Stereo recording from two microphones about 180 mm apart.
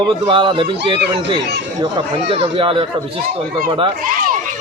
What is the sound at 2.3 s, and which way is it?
Speech, 30° right (ahead or behind).